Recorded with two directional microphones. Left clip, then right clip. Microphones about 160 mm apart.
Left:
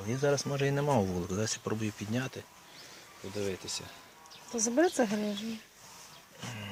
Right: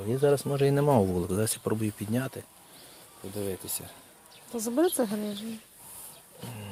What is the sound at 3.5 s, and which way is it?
Speech, 50° right (ahead or behind).